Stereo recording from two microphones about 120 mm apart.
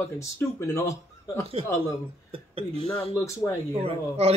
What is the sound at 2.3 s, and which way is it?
Speech, 50° right (ahead or behind).